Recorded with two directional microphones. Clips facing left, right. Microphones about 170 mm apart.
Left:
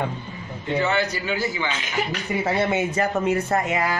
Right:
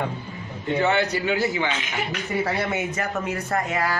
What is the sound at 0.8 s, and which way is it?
Speech, 65° right (ahead or behind).